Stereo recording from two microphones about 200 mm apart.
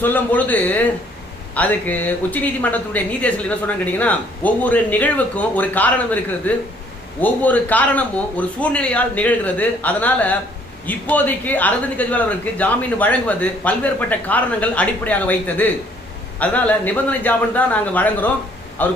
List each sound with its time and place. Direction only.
0.0 s speech: 10° left (ahead or behind)